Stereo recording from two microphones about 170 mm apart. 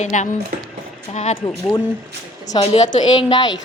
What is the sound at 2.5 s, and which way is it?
A woman's voice, 35° left (ahead or behind).